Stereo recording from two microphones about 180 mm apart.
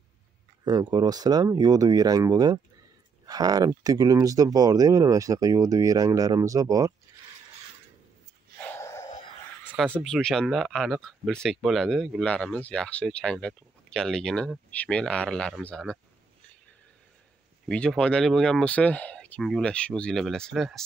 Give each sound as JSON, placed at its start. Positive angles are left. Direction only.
{"t": 0.7, "sound": "speech", "side_deg": -20}
{"t": 8.7, "sound": "a sound", "side_deg": 15}
{"t": 10.0, "sound": "speech", "side_deg": 0}
{"t": 17.6, "sound": "speech", "side_deg": 5}